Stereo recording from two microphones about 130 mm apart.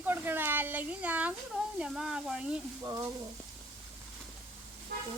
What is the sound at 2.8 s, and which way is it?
Frying, 30° right (ahead or behind).